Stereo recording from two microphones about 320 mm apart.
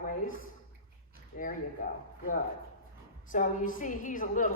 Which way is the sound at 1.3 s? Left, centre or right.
Left.